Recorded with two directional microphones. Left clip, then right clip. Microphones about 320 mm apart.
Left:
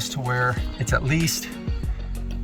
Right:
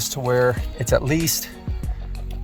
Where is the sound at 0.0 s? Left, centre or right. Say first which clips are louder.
Right 5 dB; right.